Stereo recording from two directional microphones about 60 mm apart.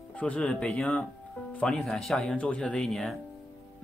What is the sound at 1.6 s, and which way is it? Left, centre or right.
Speech, centre.